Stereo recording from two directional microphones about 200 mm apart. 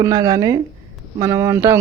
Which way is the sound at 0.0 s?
15° right (ahead or behind).